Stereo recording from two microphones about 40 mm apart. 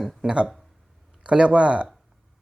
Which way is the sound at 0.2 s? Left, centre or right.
Right.